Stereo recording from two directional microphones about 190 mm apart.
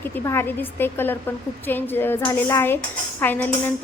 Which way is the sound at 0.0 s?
10° left (ahead or behind).